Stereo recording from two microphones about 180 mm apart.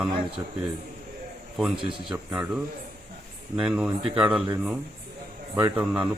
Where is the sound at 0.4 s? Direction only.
20° right (ahead or behind).